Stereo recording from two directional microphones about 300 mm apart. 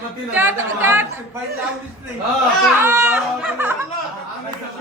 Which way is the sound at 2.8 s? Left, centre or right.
Centre.